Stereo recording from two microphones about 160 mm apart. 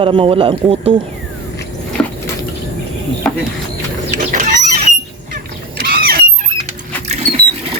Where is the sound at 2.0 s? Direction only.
10° left (ahead or behind).